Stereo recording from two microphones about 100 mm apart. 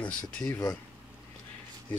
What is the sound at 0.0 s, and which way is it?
Speech, 15° left (ahead or behind).